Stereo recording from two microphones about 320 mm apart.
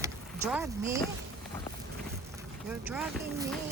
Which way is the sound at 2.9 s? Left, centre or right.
Centre.